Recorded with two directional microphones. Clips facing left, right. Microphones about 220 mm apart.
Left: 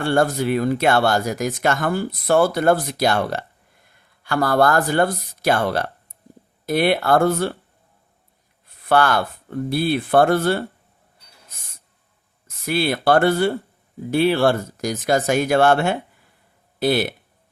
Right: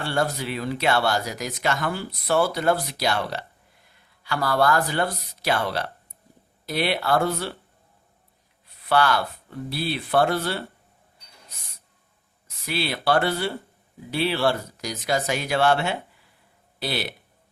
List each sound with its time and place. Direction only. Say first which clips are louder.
0.0 s speech: left 7 dB; 50° left (ahead or behind)
8.6 s speech: left 4 dB; 50° left (ahead or behind)
12.5 s speech: left 7 dB; 50° left (ahead or behind)